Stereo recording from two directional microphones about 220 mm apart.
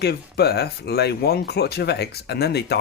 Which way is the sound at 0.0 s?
45° left (ahead or behind).